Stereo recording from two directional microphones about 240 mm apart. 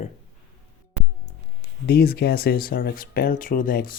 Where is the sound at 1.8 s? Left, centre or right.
Left.